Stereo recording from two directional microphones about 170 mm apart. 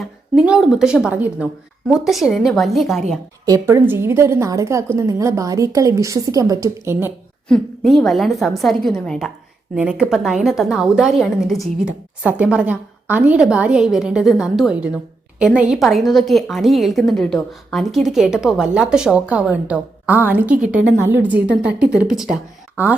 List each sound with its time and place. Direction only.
0.0 s a woman's voice: 5° right (ahead or behind)
3.4 s a woman's voice: 20° right (ahead or behind)
7.4 s a woman's voice: 5° left (ahead or behind)